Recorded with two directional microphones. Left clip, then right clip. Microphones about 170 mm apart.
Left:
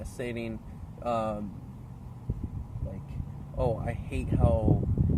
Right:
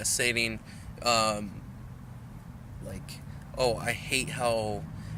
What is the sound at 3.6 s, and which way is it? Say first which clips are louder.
Speech: right 3 dB; 10° right (ahead or behind).